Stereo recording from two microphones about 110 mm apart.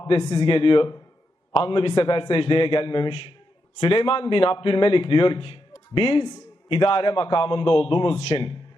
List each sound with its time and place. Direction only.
0.1 s a man's voice: 45° left (ahead or behind); by 8.4 s 60° left (ahead or behind)